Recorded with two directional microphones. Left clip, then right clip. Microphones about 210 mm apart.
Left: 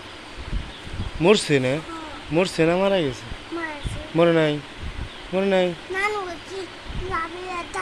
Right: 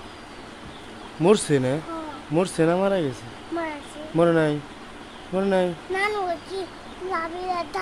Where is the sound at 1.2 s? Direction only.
10° right (ahead or behind).